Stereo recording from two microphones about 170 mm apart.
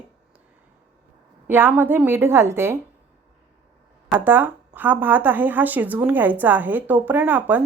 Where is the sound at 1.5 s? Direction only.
10° right (ahead or behind).